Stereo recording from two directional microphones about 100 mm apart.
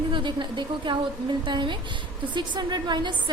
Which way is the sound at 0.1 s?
55° right (ahead or behind).